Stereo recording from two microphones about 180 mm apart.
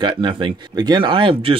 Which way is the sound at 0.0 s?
25° right (ahead or behind).